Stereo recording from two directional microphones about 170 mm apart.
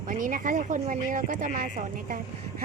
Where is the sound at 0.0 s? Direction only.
50° right (ahead or behind).